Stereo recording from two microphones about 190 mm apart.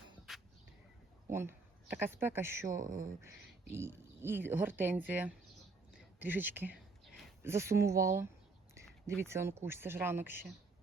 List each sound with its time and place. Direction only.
0.3 s a sound: centre (ahead or behind)
1.3 s speech: 10° right (ahead or behind)
2.8 s speech: 45° right (ahead or behind)
3.7 s speech: 15° right (ahead or behind)